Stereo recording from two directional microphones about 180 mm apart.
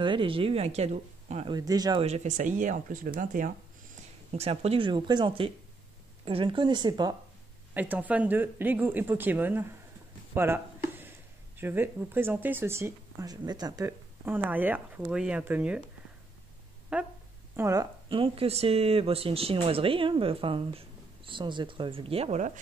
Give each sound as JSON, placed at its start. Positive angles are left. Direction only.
{"t": 0.0, "sound": "speech", "side_deg": -25}
{"t": 1.5, "sound": "speech", "side_deg": -20}
{"t": 2.0, "sound": "speech", "side_deg": -40}
{"t": 7.7, "sound": "speech", "side_deg": -10}
{"t": 16.9, "sound": "speech", "side_deg": -5}
{"t": 17.6, "sound": "speech", "side_deg": -15}
{"t": 18.0, "sound": "speech", "side_deg": -30}